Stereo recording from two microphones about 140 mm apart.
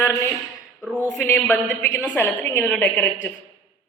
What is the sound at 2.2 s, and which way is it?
Speech, 10° left (ahead or behind).